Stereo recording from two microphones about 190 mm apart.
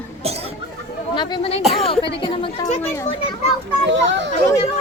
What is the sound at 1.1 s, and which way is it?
Speech, 25° left (ahead or behind).